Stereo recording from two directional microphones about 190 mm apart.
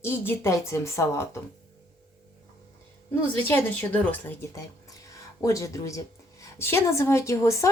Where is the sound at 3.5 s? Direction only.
10° left (ahead or behind).